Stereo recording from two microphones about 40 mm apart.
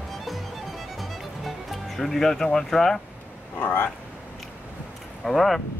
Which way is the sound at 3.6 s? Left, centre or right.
Left.